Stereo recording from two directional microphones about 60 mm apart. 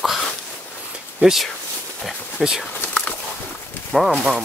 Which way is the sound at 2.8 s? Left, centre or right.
Left.